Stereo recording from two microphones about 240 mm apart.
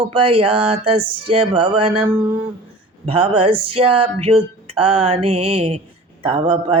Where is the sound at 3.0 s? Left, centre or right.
Right.